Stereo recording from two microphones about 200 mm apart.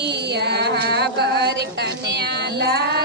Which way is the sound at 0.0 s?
55° right (ahead or behind).